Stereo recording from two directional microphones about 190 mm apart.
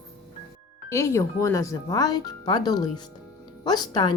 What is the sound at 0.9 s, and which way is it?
Speech, 15° left (ahead or behind).